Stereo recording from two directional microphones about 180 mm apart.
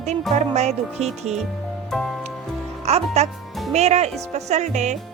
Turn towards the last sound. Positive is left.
turn(degrees=-40)  # may be behind; listen again after turning